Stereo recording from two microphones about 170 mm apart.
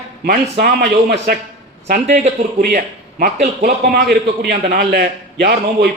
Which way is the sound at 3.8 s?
60° right (ahead or behind).